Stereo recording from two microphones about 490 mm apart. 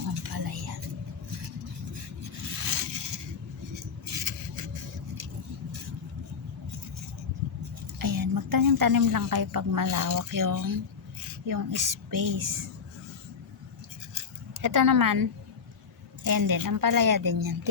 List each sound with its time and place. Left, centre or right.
0.2 s whispering: right
2.6 s scrape: right
4.0 s vehicle: right
7.9 s a woman's voice: right
14.6 s a woman's voice: right